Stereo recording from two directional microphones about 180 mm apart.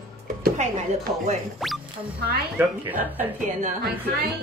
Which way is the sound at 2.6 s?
10° right (ahead or behind).